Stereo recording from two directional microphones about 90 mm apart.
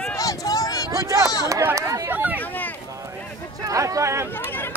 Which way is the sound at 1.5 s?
35° right (ahead or behind).